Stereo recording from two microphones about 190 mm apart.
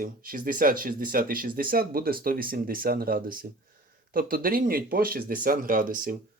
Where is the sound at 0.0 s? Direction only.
50° right (ahead or behind).